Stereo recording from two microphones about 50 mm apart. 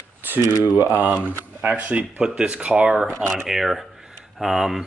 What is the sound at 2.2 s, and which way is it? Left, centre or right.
Speech, centre.